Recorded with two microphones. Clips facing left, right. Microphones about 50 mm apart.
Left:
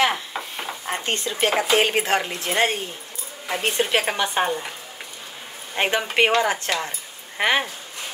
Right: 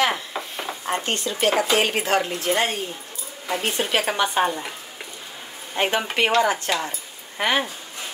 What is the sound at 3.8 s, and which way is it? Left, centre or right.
Speech, left.